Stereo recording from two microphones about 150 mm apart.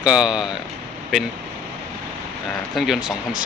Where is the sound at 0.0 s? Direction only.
5° right (ahead or behind).